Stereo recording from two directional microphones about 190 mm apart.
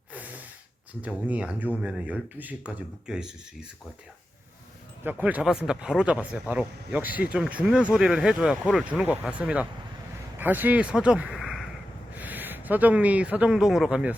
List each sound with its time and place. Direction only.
0.1 s gasp: 10° right (ahead or behind)
1.0 s speech: 5° right (ahead or behind)
5.0 s a man's voice: 10° right (ahead or behind)